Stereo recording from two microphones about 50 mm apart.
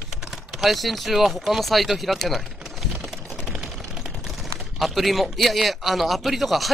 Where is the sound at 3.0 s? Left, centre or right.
Centre.